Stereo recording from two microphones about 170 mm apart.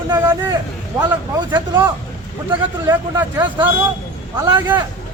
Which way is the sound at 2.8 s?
15° right (ahead or behind).